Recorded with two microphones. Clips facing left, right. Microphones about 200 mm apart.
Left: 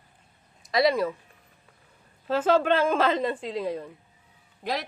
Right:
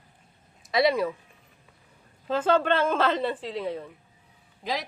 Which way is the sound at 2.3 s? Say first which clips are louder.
Left 1 dB; 5° left (ahead or behind).